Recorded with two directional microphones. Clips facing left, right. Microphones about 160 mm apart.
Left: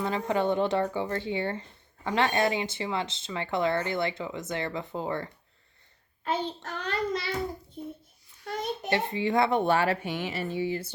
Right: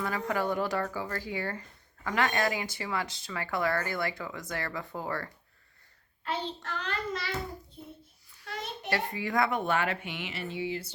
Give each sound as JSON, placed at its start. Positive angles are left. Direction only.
{"t": 0.0, "sound": "speech", "side_deg": 25}
{"t": 6.7, "sound": "speech", "side_deg": 40}
{"t": 8.4, "sound": "a child's voice", "side_deg": 45}
{"t": 8.9, "sound": "speech", "side_deg": 25}